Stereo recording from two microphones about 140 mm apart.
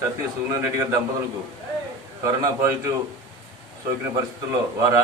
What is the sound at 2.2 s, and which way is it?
Speech, 20° right (ahead or behind).